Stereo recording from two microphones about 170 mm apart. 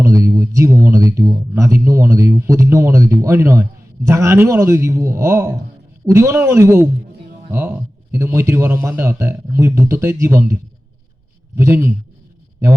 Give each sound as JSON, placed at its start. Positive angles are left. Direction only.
{"t": 0.0, "sound": "speech", "side_deg": -20}